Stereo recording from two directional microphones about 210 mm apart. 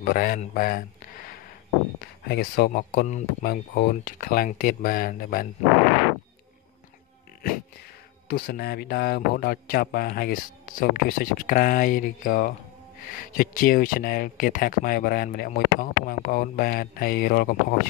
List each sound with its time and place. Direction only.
0.0 s speech: 40° left (ahead or behind)
8.3 s speech: 50° left (ahead or behind)